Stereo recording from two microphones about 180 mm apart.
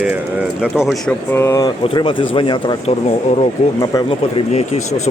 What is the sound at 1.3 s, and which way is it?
Speech, 15° left (ahead or behind).